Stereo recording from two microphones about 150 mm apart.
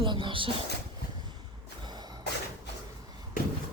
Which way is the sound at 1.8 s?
30° right (ahead or behind).